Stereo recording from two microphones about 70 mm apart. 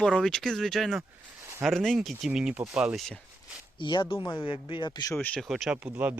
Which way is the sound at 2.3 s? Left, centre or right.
Centre.